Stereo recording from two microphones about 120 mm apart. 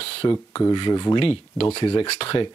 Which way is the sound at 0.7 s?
35° left (ahead or behind).